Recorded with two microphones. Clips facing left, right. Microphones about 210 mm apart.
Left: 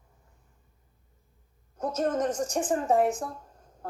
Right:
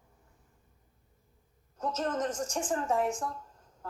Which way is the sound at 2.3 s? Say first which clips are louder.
Left 5 dB; 60° left (ahead or behind).